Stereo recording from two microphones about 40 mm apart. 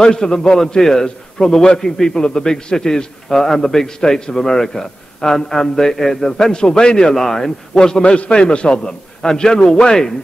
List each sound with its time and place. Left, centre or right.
0.0 s a man's voice: centre
8.0 s a man's voice: left